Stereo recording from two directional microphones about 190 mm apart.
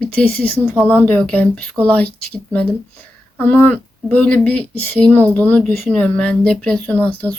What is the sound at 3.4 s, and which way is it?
Speech, 10° left (ahead or behind).